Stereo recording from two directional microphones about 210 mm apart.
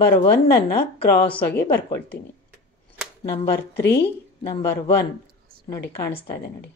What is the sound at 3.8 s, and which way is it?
Speech, 55° left (ahead or behind).